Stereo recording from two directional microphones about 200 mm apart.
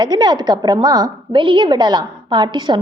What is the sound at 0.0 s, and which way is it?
A woman's voice, 20° right (ahead or behind).